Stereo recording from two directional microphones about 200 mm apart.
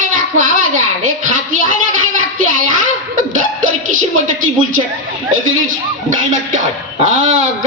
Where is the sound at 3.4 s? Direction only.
40° right (ahead or behind).